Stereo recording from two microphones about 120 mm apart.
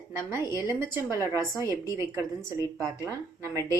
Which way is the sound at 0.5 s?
20° right (ahead or behind).